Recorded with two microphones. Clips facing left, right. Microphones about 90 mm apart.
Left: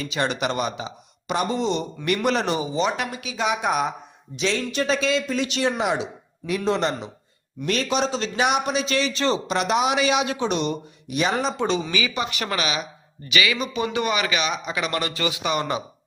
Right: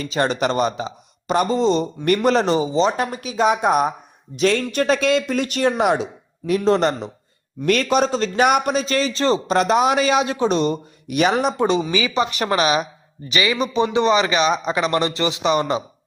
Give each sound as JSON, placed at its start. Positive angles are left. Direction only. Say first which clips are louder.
{"t": 0.0, "sound": "a man's voice", "louder": "right 4 dB", "side_deg": -35}
{"t": 7.6, "sound": "a man's voice", "louder": "right 6 dB", "side_deg": -55}
{"t": 11.1, "sound": "speech", "louder": "right 5 dB", "side_deg": -65}
{"t": 11.6, "sound": "a man's voice", "louder": "right 5 dB", "side_deg": -20}
{"t": 13.8, "sound": "speech", "louder": "right 7 dB", "side_deg": -25}